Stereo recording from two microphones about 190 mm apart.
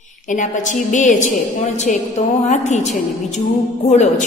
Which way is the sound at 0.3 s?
40° left (ahead or behind).